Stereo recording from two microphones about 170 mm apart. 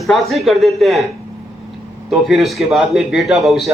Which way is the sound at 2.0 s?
Centre (ahead or behind).